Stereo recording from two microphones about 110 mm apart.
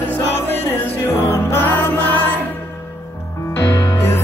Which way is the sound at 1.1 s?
25° left (ahead or behind).